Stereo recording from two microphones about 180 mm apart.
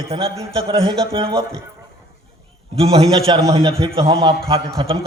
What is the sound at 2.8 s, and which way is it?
A man's voice, 30° right (ahead or behind).